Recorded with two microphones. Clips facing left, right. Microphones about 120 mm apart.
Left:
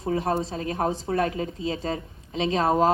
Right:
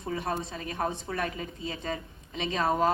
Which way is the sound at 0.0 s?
30° left (ahead or behind).